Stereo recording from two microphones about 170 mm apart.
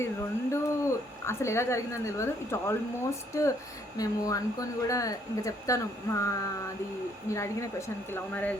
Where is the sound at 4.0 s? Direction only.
20° left (ahead or behind).